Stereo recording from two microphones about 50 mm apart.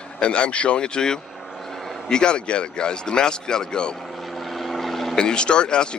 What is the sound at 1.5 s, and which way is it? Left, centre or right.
Vehicle, centre.